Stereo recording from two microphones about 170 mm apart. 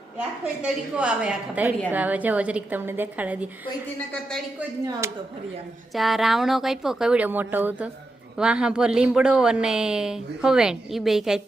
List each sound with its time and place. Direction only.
0.6 s a woman's voice: 5° right (ahead or behind)
4.9 s a woman's voice: 15° right (ahead or behind)
5.9 s a woman's voice: centre (ahead or behind)